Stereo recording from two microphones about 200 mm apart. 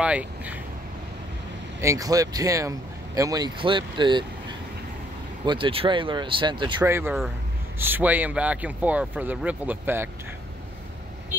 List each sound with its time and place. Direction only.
0.0 s speech: 5° right (ahead or behind)
1.8 s speech: 15° right (ahead or behind)
5.4 s speech: 25° right (ahead or behind)
6.8 s speech: 10° right (ahead or behind)